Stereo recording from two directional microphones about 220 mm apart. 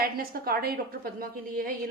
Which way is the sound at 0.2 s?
45° right (ahead or behind).